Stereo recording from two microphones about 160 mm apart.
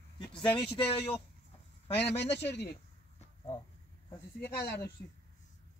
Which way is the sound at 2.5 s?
90° left.